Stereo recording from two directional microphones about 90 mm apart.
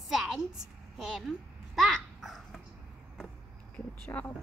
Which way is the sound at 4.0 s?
20° left (ahead or behind).